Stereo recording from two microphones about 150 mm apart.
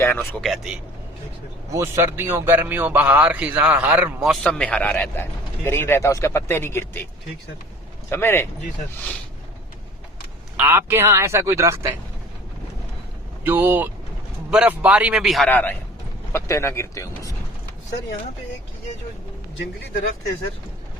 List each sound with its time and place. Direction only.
0.0 s speech: 15° left (ahead or behind)
0.4 s speech: centre (ahead or behind)
1.7 s a man's voice: 15° right (ahead or behind); by 7.0 s 15° left (ahead or behind)
8.1 s speech: 15° left (ahead or behind)
10.6 s a man's voice: 15° right (ahead or behind)
13.4 s a man's voice: 15° right (ahead or behind)
15.4 s speech: 10° left (ahead or behind)